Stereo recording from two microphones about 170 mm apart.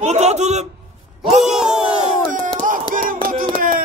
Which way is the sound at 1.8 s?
45° right (ahead or behind).